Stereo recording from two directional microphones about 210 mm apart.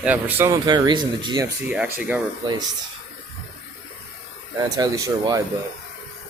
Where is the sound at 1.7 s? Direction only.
10° right (ahead or behind).